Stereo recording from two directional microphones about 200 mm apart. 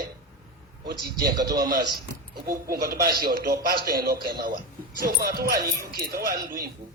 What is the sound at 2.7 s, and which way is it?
A man's voice, 50° right (ahead or behind).